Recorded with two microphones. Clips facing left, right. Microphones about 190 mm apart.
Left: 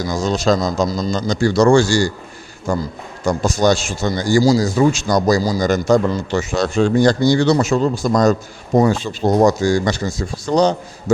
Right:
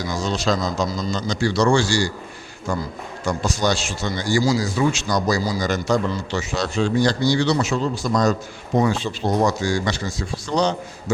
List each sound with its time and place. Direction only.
0.0 s speech: 45° left (ahead or behind)